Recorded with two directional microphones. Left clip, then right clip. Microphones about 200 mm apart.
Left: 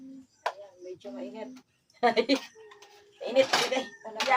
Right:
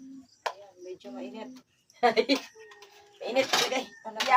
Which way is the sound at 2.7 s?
15° left (ahead or behind).